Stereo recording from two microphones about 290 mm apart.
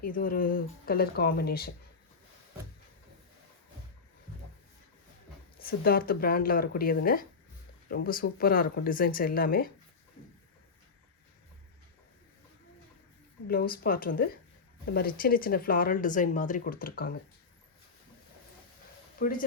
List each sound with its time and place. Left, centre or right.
0.0 s speech: left
5.6 s speech: left
13.5 s speech: left
19.2 s speech: left